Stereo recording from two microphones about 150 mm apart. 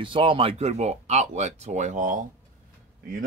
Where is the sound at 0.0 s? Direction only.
35° right (ahead or behind); by 2.2 s 60° right (ahead or behind).